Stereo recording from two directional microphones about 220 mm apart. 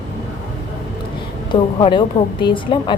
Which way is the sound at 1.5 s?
25° left (ahead or behind).